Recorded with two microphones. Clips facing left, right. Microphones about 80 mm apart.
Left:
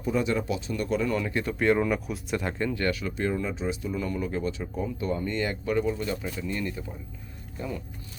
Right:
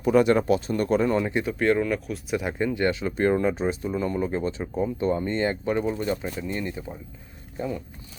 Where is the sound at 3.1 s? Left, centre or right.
Right.